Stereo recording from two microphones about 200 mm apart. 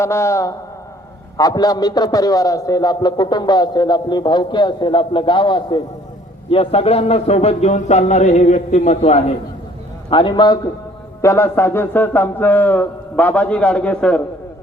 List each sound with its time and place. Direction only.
0.0 s a man's voice: 15° left (ahead or behind)